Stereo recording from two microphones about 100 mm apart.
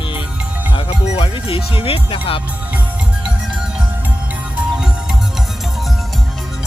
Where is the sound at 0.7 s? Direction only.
65° left (ahead or behind).